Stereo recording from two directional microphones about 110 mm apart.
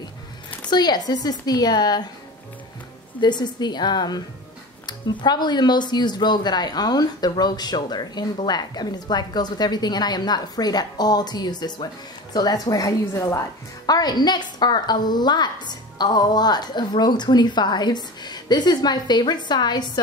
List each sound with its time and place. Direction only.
0.7 s a woman's voice: 40° left (ahead or behind)
3.2 s a woman's voice: 40° left (ahead or behind)